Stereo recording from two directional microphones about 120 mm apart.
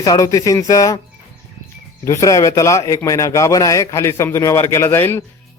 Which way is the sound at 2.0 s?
25° left (ahead or behind).